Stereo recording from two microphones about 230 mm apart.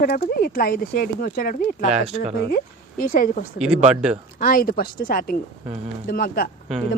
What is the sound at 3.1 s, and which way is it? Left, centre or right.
Speech, left.